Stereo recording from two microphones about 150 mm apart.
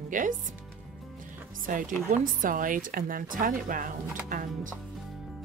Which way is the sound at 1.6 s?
65° right (ahead or behind).